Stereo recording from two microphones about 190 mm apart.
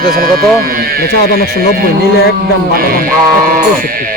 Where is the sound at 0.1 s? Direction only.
45° right (ahead or behind).